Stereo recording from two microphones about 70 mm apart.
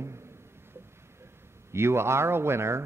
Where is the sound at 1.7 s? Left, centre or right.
Right.